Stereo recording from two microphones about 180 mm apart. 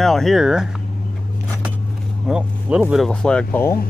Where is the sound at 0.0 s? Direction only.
Centre (ahead or behind).